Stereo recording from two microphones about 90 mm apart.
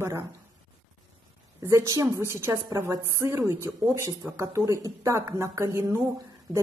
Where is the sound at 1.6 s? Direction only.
35° right (ahead or behind).